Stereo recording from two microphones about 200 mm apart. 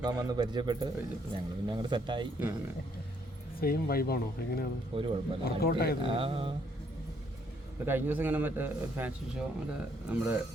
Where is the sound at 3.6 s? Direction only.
50° left (ahead or behind).